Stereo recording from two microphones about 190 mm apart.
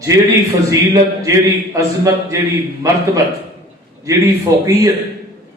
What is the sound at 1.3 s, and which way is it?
A man's voice, 15° right (ahead or behind).